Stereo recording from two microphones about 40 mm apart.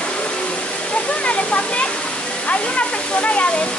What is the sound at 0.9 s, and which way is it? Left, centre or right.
Waterfall, left.